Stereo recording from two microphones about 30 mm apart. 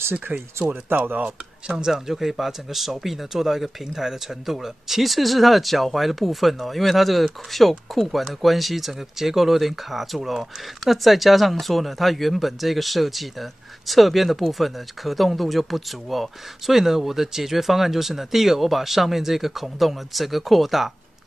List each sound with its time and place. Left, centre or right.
0.3 s speech: right
1.9 s speech: centre